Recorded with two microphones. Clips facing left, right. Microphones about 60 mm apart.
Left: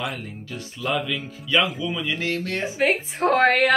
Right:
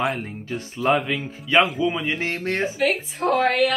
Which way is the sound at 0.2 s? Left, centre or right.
Right.